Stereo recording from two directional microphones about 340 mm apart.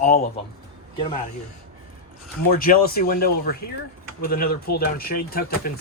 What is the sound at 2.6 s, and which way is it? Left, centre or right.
Speech, left.